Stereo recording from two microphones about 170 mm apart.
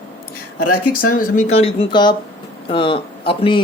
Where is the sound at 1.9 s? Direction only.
25° left (ahead or behind).